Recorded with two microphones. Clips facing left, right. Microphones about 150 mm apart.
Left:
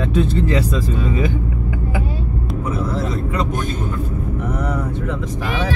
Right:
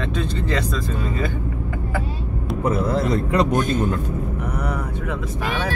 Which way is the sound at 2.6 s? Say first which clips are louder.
Right 4 dB; 60° right (ahead or behind).